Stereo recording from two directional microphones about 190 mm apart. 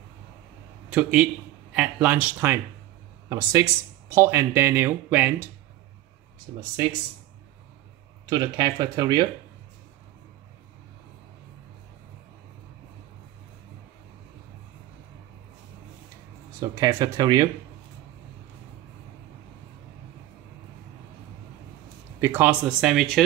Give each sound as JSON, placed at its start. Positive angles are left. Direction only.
{"t": 0.8, "sound": "speech", "side_deg": -5}
{"t": 8.3, "sound": "speech", "side_deg": -20}
{"t": 16.5, "sound": "speech", "side_deg": -15}
{"t": 22.2, "sound": "speech", "side_deg": -10}